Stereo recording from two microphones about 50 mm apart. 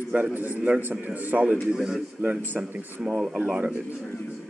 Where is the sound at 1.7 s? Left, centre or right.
Centre.